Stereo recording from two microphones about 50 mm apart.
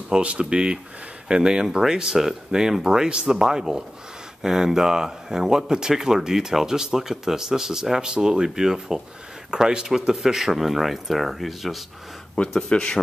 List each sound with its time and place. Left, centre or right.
0.2 s speech: right; by 11.8 s centre
12.4 s a man's voice: left